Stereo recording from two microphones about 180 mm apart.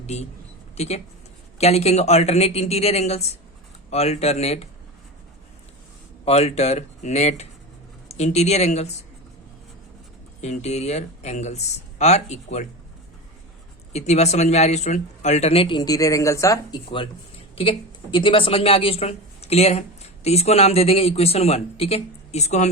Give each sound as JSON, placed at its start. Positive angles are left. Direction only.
{"t": 0.0, "sound": "speech", "side_deg": 35}
{"t": 6.2, "sound": "speech", "side_deg": 35}
{"t": 10.4, "sound": "speech", "side_deg": 40}
{"t": 13.9, "sound": "speech", "side_deg": 35}